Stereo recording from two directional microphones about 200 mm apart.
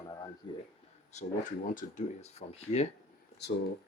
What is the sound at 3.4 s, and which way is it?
Speech, 55° left (ahead or behind).